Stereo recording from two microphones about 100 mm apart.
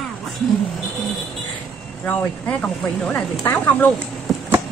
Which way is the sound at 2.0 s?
10° left (ahead or behind).